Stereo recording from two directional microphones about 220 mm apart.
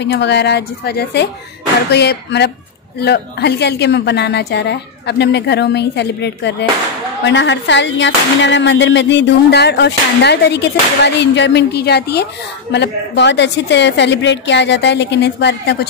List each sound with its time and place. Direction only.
0.0 s speech: 50° left (ahead or behind)